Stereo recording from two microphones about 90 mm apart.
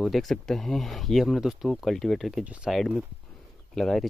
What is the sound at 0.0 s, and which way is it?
Speech, centre (ahead or behind).